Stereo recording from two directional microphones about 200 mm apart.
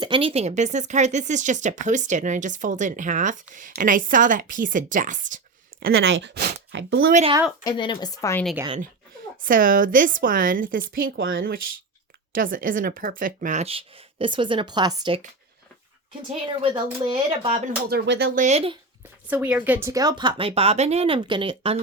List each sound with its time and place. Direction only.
0.0 s speech: 25° right (ahead or behind); by 5.4 s 40° right (ahead or behind)
6.0 s speech: 65° right (ahead or behind)
7.1 s speech: 35° right (ahead or behind)
7.6 s speech: 25° left (ahead or behind)
9.4 s a woman's voice: 45° right (ahead or behind); by 15.2 s 20° right (ahead or behind)
16.3 s speech: 30° right (ahead or behind)
17.8 s a woman's voice: 55° right (ahead or behind)
18.3 s speech: 35° right (ahead or behind)
19.3 s speech: 10° right (ahead or behind); by 21.8 s 25° right (ahead or behind)